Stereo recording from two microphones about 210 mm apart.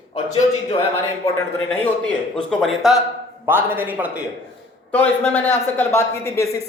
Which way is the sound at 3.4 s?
10° right (ahead or behind).